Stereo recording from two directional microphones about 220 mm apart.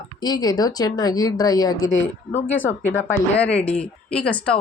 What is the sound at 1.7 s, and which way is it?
Speech, 65° left (ahead or behind).